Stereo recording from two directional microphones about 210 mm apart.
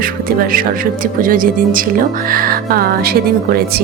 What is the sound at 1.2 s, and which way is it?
Speech, 40° right (ahead or behind).